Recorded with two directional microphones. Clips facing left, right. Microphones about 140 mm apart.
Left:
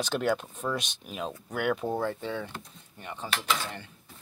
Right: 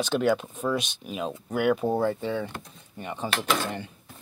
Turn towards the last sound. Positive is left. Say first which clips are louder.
# right 4 dB
turn(degrees=-55)  # may be behind; listen again after turning